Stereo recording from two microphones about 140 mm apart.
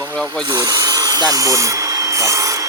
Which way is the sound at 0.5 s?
25° right (ahead or behind).